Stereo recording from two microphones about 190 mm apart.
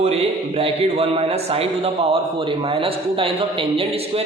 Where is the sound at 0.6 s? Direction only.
30° right (ahead or behind).